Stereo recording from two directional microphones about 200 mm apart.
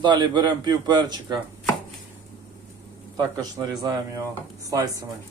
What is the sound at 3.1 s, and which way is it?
A man's voice, 20° right (ahead or behind).